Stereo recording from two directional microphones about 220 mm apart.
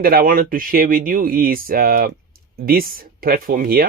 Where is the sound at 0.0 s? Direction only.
40° right (ahead or behind).